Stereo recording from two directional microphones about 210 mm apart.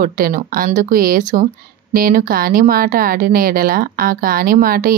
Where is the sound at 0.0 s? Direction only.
45° right (ahead or behind).